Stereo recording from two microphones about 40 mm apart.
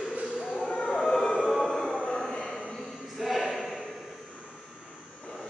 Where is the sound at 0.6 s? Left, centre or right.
Left.